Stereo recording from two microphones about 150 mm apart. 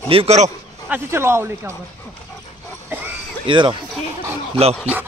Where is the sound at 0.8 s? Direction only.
15° right (ahead or behind).